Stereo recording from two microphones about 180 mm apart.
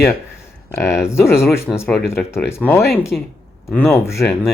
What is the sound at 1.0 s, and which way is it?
Speech, 15° left (ahead or behind).